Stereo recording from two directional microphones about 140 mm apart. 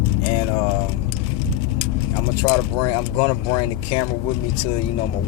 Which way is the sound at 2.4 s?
20° left (ahead or behind).